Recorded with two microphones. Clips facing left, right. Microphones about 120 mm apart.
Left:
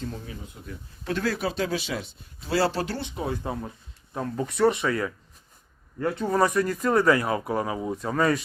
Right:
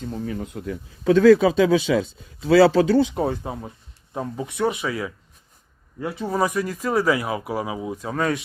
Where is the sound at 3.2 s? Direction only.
50° right (ahead or behind).